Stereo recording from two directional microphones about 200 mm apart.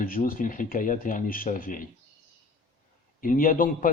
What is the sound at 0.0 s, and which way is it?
A man's voice, 45° left (ahead or behind).